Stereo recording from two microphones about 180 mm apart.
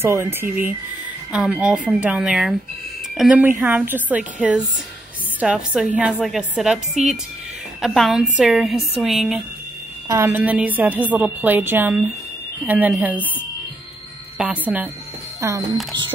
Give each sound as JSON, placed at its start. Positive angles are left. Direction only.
{"t": 0.0, "sound": "a woman's voice", "side_deg": -15}
{"t": 7.8, "sound": "speech", "side_deg": 0}
{"t": 10.0, "sound": "a woman's voice", "side_deg": -15}
{"t": 14.4, "sound": "a woman's voice", "side_deg": -5}